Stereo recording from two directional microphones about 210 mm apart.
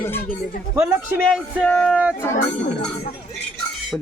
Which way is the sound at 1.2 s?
5° left (ahead or behind).